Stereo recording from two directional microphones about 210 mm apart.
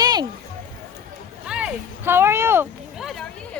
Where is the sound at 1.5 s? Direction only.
5° right (ahead or behind).